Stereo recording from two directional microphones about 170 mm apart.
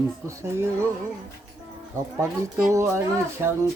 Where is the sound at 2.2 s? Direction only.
15° right (ahead or behind).